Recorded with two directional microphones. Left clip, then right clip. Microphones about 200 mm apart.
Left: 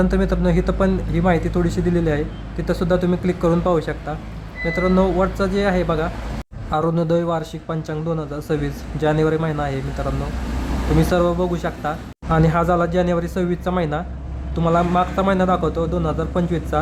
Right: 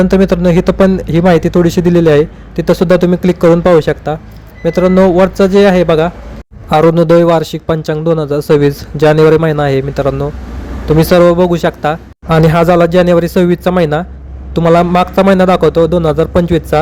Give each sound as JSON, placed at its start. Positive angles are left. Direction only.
{"t": 0.0, "sound": "a man's voice", "side_deg": -35}